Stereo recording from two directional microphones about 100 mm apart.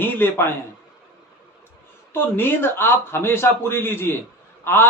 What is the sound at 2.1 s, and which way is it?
A man's voice, 20° left (ahead or behind).